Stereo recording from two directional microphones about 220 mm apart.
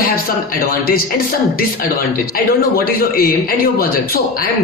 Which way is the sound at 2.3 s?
40° left (ahead or behind).